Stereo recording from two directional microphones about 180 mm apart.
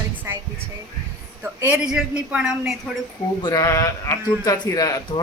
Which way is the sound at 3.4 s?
20° left (ahead or behind).